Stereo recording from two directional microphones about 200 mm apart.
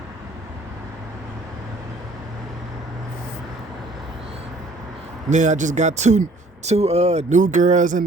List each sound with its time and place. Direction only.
5.3 s speech: 35° right (ahead or behind)